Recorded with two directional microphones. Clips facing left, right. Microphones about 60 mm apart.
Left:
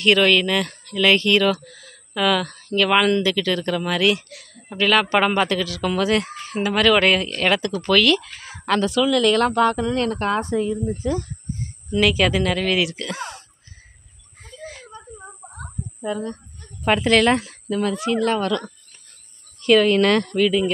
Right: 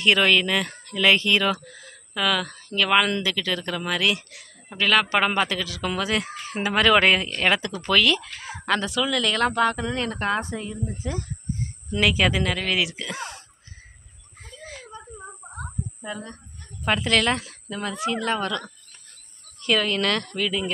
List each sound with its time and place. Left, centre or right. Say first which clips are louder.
0.0 s speech: left 3 dB; centre
2.1 s speech: left 4 dB; centre
6.5 s speech: left 2 dB; centre
14.6 s a sound: left 2 dB; centre
16.8 s speech: left 5 dB; centre
17.6 s speech: left 8 dB; centre
17.9 s speech: left 4 dB; centre
18.2 s speech: left 5 dB; centre
19.6 s speech: left 8 dB; centre